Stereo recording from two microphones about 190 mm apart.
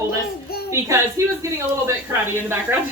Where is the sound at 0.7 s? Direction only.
15° right (ahead or behind).